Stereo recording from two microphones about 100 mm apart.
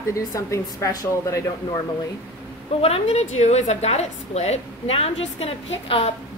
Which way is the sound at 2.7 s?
85° left.